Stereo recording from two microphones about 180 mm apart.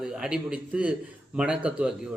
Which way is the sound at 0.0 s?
5° right (ahead or behind).